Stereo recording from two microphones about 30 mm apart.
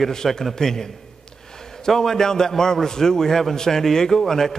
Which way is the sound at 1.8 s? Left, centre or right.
Centre.